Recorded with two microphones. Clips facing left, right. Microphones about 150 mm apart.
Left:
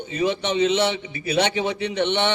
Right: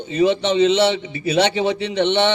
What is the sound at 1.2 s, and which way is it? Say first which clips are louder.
Speech: right 4 dB; 20° right (ahead or behind).